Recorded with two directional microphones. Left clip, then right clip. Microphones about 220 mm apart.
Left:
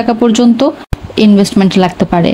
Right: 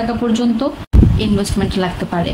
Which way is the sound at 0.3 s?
30° left (ahead or behind).